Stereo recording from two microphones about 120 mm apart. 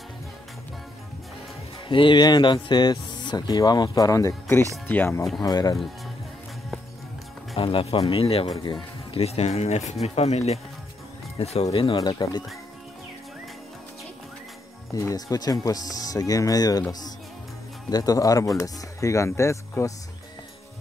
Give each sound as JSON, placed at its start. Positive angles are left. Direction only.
{"t": 1.9, "sound": "speech", "side_deg": 45}
{"t": 5.4, "sound": "speech", "side_deg": 35}
{"t": 7.5, "sound": "speech", "side_deg": 50}
{"t": 8.6, "sound": "music", "side_deg": 40}
{"t": 9.2, "sound": "speech", "side_deg": 60}
{"t": 15.0, "sound": "speech", "side_deg": 30}
{"t": 17.8, "sound": "speech", "side_deg": 30}